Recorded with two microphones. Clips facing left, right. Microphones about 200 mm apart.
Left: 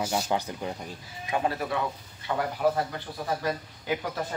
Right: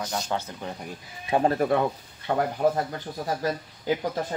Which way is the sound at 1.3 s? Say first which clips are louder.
Right 6 dB; 40° right (ahead or behind).